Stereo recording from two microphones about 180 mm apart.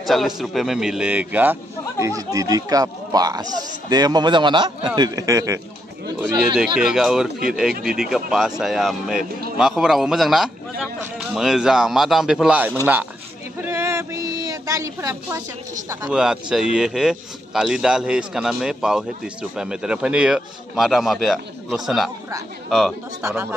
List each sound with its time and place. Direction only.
0.0 s a man's voice: centre (ahead or behind); by 5.6 s 20° right (ahead or behind)
6.1 s a man's voice: 5° right (ahead or behind)
13.7 s a sound: 15° right (ahead or behind)
16.1 s speech: 5° right (ahead or behind)
23.2 s speech: 15° right (ahead or behind)